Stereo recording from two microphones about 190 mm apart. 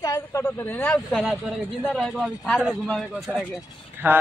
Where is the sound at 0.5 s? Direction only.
10° left (ahead or behind).